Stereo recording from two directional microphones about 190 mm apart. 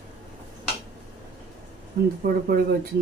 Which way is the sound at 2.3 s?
50° right (ahead or behind).